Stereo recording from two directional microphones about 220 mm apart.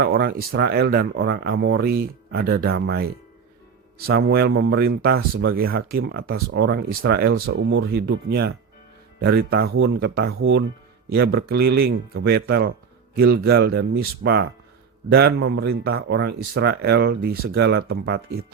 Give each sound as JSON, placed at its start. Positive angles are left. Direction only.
{"t": 0.0, "sound": "speech", "side_deg": -45}
{"t": 7.4, "sound": "speech", "side_deg": -60}
{"t": 10.3, "sound": "speech", "side_deg": -60}
{"t": 11.1, "sound": "speech", "side_deg": -45}